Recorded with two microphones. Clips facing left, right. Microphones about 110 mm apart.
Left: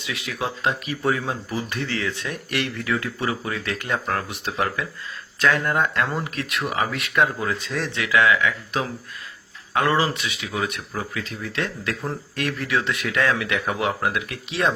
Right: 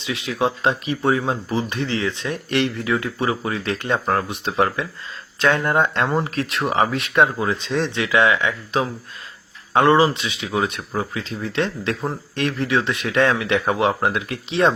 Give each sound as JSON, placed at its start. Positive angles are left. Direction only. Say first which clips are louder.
{"t": 0.0, "sound": "speech", "louder": "right 6 dB", "side_deg": -25}